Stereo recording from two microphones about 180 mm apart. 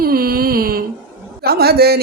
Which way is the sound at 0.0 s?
55° right (ahead or behind).